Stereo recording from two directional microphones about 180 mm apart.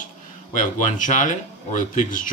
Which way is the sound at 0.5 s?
45° left (ahead or behind).